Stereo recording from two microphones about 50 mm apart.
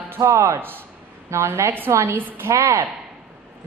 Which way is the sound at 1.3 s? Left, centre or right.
Right.